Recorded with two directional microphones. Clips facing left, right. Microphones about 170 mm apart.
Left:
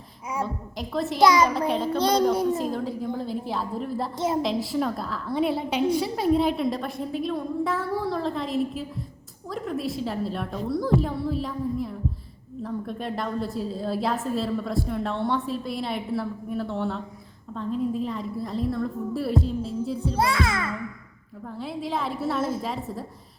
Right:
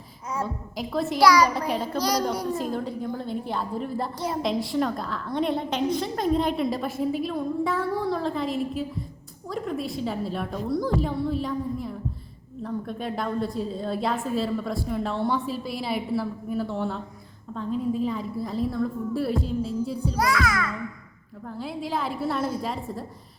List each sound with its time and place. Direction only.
0.4 s a woman's voice: centre (ahead or behind)
1.2 s a child's voice: 20° left (ahead or behind)
1.5 s a woman's voice: centre (ahead or behind)
2.0 s a child's voice: 25° left (ahead or behind)
2.6 s a woman's voice: centre (ahead or behind)
20.1 s a child's voice: 25° left (ahead or behind)
21.4 s a woman's voice: centre (ahead or behind)